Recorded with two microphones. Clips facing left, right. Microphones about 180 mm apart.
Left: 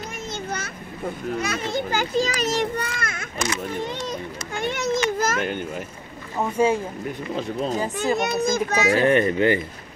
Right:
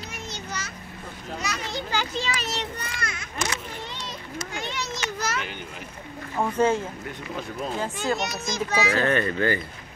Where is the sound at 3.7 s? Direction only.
50° left (ahead or behind).